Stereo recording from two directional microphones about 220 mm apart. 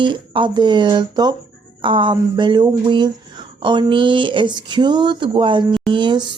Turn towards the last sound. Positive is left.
turn(degrees=-20)  # may be behind; listen again after turning